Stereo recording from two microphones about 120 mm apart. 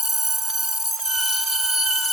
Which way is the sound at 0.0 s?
Centre (ahead or behind).